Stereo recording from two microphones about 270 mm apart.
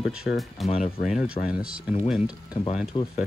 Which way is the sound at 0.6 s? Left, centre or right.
Left.